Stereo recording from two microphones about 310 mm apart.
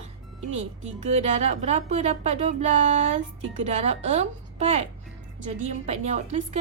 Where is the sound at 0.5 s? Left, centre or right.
Right.